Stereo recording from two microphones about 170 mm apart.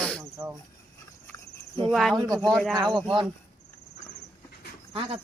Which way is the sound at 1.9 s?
Centre (ahead or behind).